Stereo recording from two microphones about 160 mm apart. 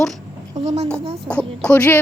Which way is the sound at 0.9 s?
10° left (ahead or behind).